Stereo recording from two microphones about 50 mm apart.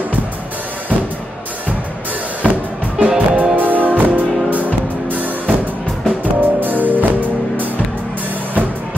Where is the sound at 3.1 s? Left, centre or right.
Right.